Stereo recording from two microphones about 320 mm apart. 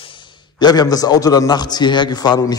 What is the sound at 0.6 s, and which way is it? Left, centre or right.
A man's voice, centre.